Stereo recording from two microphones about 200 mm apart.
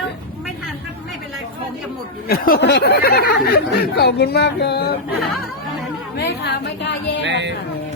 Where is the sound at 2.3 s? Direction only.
50° left (ahead or behind).